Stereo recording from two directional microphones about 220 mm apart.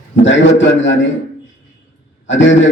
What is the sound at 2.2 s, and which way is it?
Speech, 55° left (ahead or behind).